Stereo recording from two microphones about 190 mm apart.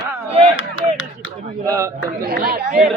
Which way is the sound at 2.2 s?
50° right (ahead or behind).